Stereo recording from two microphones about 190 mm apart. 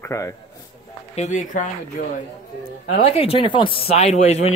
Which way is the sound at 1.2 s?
40° left (ahead or behind).